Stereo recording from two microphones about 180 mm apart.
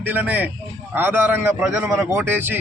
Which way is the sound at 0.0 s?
10° right (ahead or behind).